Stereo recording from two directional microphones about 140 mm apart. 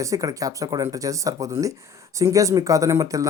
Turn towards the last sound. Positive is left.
turn(degrees=-25)  # may be behind; listen again after turning